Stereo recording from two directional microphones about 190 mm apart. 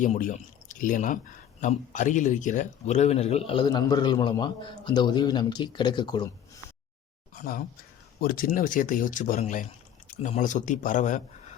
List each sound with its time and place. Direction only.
0.0 s speech: 40° left (ahead or behind); by 6.2 s 25° left (ahead or behind)
7.3 s speech: 45° left (ahead or behind)